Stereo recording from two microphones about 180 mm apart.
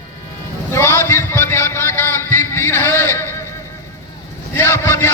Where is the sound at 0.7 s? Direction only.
15° left (ahead or behind).